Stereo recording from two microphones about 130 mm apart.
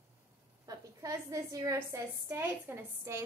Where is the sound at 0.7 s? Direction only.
25° right (ahead or behind).